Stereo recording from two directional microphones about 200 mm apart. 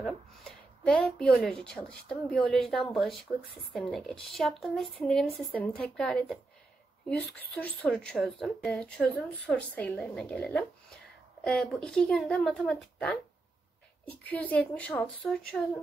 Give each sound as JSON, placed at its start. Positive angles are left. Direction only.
{"t": 0.0, "sound": "a woman's voice", "side_deg": 0}
{"t": 7.8, "sound": "a woman's voice", "side_deg": 5}